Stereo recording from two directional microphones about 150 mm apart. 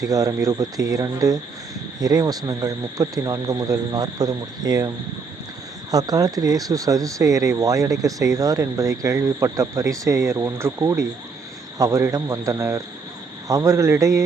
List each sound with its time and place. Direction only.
0.0 s speech: 25° right (ahead or behind)
5.9 s speech: 25° right (ahead or behind)